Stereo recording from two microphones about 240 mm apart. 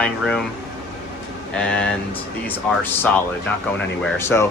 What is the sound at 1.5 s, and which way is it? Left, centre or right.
Speech, centre.